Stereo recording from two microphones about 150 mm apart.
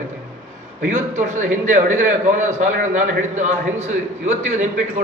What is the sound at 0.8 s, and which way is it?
A man's voice, 55° right (ahead or behind).